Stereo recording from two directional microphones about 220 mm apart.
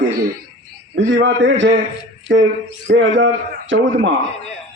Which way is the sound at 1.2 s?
55° right (ahead or behind).